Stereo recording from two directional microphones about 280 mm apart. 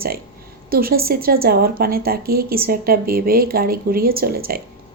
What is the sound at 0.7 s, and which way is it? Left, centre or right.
Speech, right.